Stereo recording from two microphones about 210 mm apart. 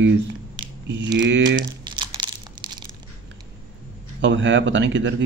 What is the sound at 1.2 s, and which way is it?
Speech, 60° right (ahead or behind).